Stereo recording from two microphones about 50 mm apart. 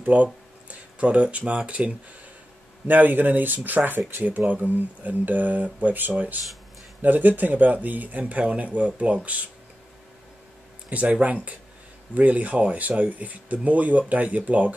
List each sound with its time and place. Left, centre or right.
0.0 s a sound: right
1.7 s speech: right
2.9 s speech: right
10.9 s speech: right